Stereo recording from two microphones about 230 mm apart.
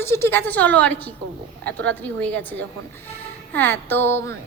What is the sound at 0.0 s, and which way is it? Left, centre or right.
A woman's voice, centre.